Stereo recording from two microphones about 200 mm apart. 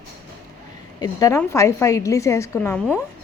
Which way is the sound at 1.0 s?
20° left (ahead or behind).